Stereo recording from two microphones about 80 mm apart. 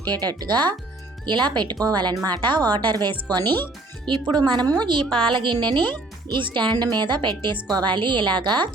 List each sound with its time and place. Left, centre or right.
0.0 s a woman's voice: right
4.8 s a woman's voice: right